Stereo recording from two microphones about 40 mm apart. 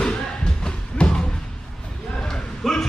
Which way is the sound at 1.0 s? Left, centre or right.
Left.